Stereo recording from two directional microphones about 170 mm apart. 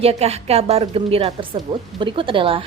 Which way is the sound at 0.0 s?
35° right (ahead or behind).